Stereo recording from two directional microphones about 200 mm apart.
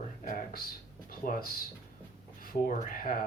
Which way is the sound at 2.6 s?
40° left (ahead or behind).